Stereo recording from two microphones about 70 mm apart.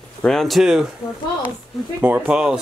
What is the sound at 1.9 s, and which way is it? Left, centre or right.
Speech, right.